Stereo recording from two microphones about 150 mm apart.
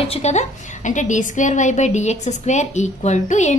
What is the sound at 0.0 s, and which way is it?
A woman's voice, 45° left (ahead or behind).